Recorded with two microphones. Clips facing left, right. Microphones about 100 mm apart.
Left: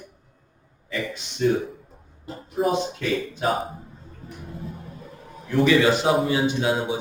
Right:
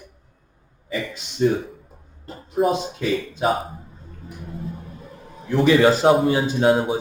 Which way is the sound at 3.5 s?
Centre (ahead or behind).